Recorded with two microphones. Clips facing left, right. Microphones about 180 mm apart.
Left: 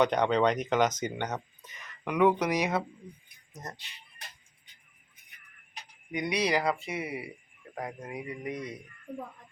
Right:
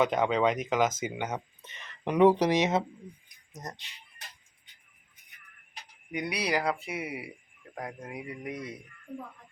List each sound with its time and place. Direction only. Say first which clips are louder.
0.0 s speech: left 1 dB; 5° right (ahead or behind)
1.6 s speech: right 3 dB; 25° right (ahead or behind)
6.1 s speech: left 2 dB; 5° right (ahead or behind)
7.8 s speech: left 1 dB; 5° left (ahead or behind)
8.1 s speech: left 2 dB; 10° right (ahead or behind)